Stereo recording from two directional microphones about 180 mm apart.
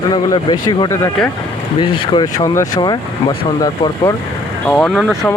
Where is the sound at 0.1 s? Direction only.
25° left (ahead or behind).